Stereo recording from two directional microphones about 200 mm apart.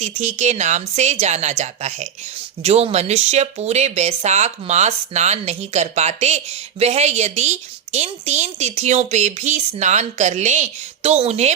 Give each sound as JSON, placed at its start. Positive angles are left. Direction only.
{"t": 0.0, "sound": "speech", "side_deg": -35}